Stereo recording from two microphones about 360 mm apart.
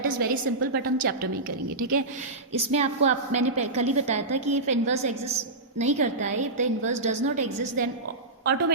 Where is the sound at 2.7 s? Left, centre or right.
Centre.